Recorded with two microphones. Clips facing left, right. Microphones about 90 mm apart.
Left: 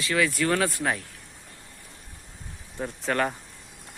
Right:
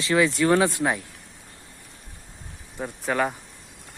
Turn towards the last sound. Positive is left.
turn(degrees=-5)  # may be behind; listen again after turning